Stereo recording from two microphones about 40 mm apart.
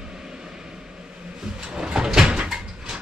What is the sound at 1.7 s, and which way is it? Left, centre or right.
Sliding door, right.